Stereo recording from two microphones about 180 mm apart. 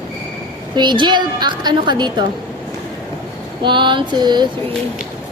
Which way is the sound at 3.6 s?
25° right (ahead or behind).